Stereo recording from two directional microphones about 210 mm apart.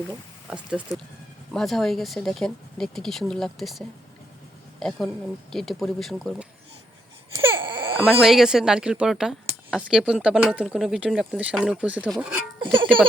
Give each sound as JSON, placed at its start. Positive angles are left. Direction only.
{"t": 0.5, "sound": "speech", "side_deg": -5}
{"t": 0.9, "sound": "speech", "side_deg": 15}
{"t": 1.5, "sound": "speech", "side_deg": 0}
{"t": 7.3, "sound": "baby cry", "side_deg": -20}
{"t": 8.0, "sound": "speech", "side_deg": 0}
{"t": 12.7, "sound": "speech", "side_deg": -25}